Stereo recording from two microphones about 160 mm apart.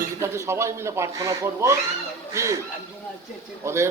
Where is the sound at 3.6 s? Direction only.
15° right (ahead or behind).